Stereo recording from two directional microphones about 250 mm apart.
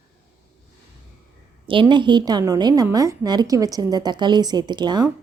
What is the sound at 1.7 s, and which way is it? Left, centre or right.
A woman's voice, centre.